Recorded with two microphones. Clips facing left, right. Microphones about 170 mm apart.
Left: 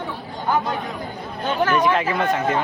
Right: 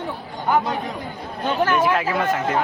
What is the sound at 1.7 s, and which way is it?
Speech, 5° right (ahead or behind).